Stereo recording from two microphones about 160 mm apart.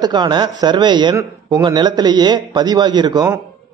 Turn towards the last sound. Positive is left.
turn(degrees=-25)  # may be behind; listen again after turning